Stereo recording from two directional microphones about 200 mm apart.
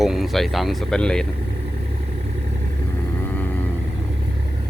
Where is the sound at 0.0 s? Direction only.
Centre (ahead or behind).